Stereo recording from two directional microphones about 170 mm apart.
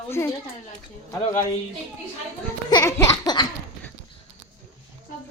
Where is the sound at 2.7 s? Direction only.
25° left (ahead or behind).